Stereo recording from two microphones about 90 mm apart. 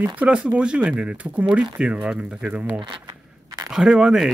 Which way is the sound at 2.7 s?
60° right (ahead or behind).